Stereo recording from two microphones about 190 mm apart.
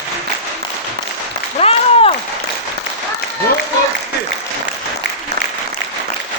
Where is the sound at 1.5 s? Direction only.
30° left (ahead or behind).